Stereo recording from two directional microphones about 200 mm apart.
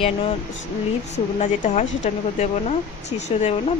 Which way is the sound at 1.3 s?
35° left (ahead or behind).